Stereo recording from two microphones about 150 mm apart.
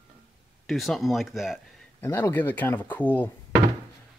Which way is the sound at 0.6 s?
Centre (ahead or behind).